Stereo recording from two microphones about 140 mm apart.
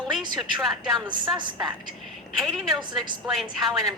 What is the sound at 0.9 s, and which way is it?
Speech, 30° right (ahead or behind).